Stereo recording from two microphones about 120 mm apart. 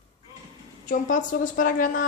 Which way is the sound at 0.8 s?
90° left.